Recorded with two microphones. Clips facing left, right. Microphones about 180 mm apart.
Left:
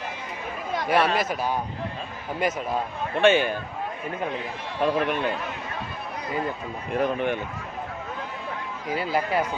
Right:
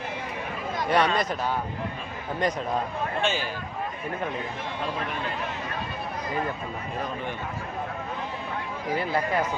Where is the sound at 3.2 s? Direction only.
60° left (ahead or behind).